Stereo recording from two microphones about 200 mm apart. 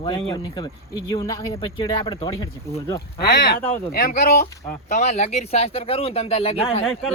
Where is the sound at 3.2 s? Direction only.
50° left (ahead or behind).